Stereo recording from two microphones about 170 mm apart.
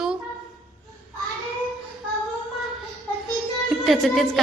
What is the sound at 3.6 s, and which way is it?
Speech, centre (ahead or behind).